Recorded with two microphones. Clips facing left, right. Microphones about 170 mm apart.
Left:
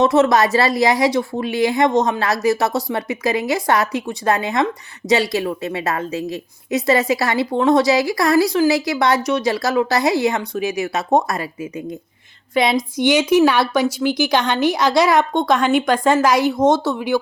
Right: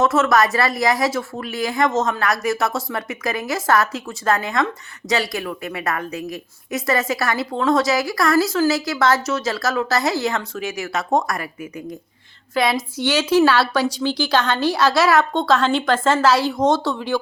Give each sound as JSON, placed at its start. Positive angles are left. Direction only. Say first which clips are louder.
{"t": 0.2, "sound": "a woman's voice", "louder": "left 3 dB", "side_deg": 20}